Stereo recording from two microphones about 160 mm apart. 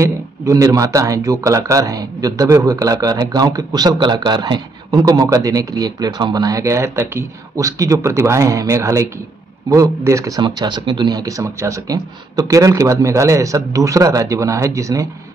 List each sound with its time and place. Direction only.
0.0 s speech: 20° right (ahead or behind)